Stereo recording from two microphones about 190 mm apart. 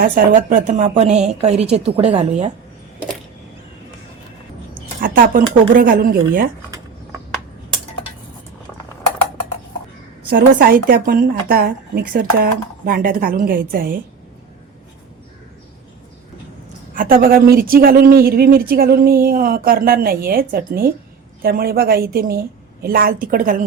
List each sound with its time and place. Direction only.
0.0 s a woman's voice: 45° right (ahead or behind)
4.9 s speech: 45° right (ahead or behind)
10.2 s speech: 50° right (ahead or behind)
16.9 s speech: 50° right (ahead or behind)